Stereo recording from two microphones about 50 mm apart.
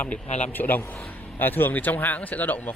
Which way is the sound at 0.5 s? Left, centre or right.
Left.